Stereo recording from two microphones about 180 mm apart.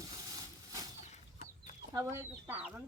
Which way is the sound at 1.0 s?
40° left (ahead or behind).